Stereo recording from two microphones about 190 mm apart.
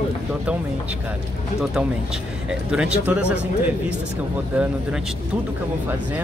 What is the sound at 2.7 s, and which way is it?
Speech, 5° right (ahead or behind).